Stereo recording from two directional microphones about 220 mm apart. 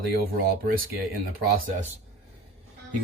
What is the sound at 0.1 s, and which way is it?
Speech, 45° right (ahead or behind).